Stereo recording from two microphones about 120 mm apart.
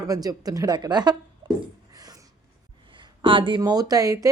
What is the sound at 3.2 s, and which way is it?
A woman's voice, 45° right (ahead or behind).